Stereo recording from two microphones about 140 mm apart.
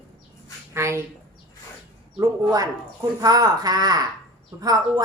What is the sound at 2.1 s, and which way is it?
A man's voice, 25° right (ahead or behind).